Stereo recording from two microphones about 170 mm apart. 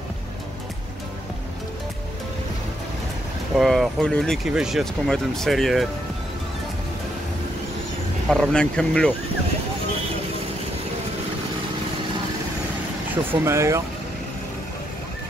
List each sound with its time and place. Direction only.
3.5 s speech: centre (ahead or behind)
8.3 s speech: 5° left (ahead or behind)
13.4 s speech: 15° right (ahead or behind)